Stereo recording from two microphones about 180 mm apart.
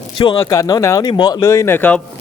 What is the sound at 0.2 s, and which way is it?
Speech, 25° left (ahead or behind).